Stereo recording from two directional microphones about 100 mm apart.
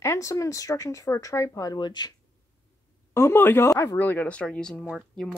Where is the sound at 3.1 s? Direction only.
25° left (ahead or behind).